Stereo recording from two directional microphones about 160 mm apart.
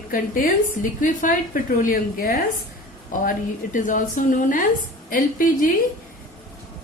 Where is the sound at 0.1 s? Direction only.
55° left (ahead or behind).